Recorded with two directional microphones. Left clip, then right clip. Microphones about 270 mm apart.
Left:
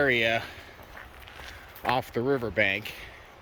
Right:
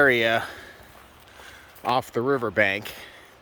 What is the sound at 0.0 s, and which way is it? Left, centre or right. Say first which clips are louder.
Speech: right 5 dB; centre.